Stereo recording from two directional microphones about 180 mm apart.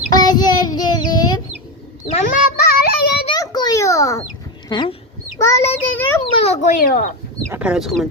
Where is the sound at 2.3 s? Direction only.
55° left (ahead or behind).